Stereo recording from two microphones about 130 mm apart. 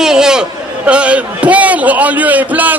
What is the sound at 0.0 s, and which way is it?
A man's voice, 5° right (ahead or behind).